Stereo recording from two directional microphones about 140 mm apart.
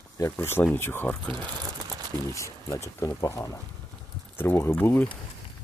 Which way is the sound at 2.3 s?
20° left (ahead or behind).